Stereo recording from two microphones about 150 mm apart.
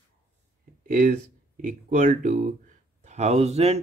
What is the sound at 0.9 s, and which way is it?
Speech, 60° right (ahead or behind).